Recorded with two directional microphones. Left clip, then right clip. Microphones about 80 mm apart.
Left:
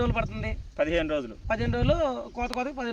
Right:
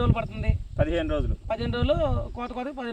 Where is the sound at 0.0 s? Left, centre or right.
Centre.